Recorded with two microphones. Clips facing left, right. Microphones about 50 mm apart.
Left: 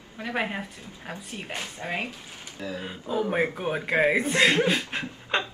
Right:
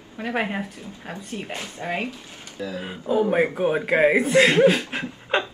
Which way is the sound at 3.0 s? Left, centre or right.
Right.